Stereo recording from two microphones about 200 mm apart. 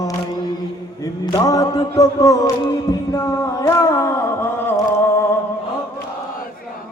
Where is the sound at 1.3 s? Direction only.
20° left (ahead or behind).